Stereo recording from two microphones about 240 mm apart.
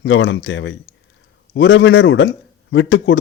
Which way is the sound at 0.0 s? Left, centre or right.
Left.